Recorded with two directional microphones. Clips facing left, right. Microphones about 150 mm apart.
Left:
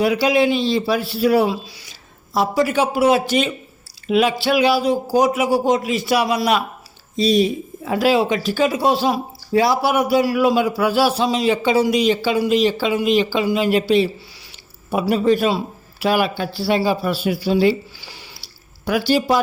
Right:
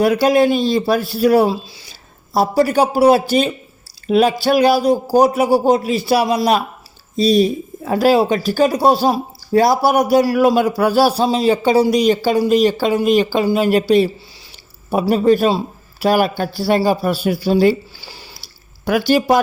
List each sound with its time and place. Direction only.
0.0 s a man's voice: 45° right (ahead or behind)
18.9 s speech: 50° right (ahead or behind)